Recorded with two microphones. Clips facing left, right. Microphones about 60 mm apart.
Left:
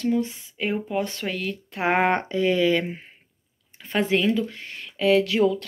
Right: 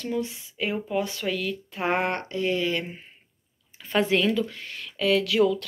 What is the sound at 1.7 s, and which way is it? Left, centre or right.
Speech, left.